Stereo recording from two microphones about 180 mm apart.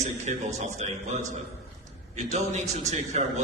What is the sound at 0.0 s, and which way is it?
A man's voice, 40° right (ahead or behind).